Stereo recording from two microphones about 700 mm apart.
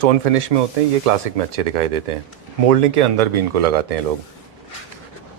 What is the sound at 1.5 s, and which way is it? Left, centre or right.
Speech, right.